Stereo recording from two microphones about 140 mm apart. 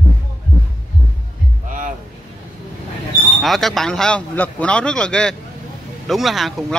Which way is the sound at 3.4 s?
Centre (ahead or behind).